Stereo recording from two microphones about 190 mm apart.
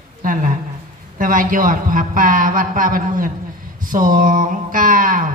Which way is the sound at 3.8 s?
45° right (ahead or behind).